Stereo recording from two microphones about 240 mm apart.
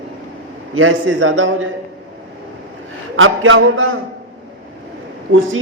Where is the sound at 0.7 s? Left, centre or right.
Right.